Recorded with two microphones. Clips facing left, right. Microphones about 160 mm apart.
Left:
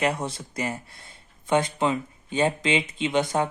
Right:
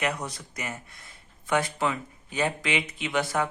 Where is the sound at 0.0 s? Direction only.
30° left (ahead or behind).